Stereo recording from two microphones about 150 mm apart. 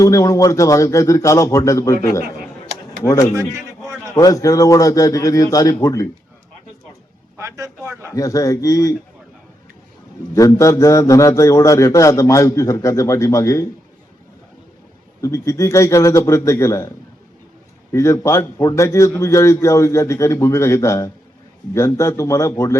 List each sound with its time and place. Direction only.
0.0 s a man's voice: 20° left (ahead or behind)
3.5 s a sound: 20° right (ahead or behind)
4.1 s a man's voice: 20° left (ahead or behind)
7.3 s a man's voice: 20° right (ahead or behind)
8.1 s a man's voice: 20° left (ahead or behind)
10.3 s a man's voice: 20° left (ahead or behind)
15.2 s a man's voice: 20° left (ahead or behind)
17.9 s a man's voice: 20° left (ahead or behind)